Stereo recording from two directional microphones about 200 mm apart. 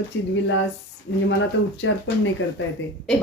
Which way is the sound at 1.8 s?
70° left (ahead or behind).